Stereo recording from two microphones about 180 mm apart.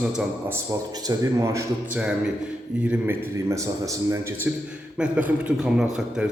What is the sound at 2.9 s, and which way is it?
A man's voice, 15° right (ahead or behind).